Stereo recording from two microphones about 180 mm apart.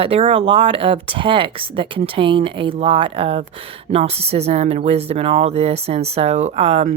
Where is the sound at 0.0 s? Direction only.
30° right (ahead or behind).